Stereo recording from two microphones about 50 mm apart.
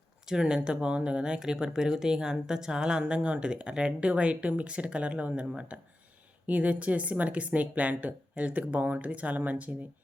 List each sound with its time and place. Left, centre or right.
0.3 s speech: centre; by 9.7 s right